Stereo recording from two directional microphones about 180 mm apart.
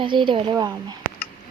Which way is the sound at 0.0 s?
25° right (ahead or behind).